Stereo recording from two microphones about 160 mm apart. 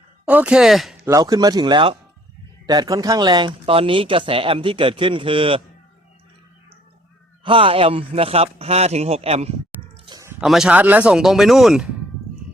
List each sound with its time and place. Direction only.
0.3 s speech: 10° right (ahead or behind)
1.0 s speech: 20° right (ahead or behind)
7.4 s speech: 35° right (ahead or behind)
10.1 s a sound: 20° right (ahead or behind)
10.4 s speech: centre (ahead or behind)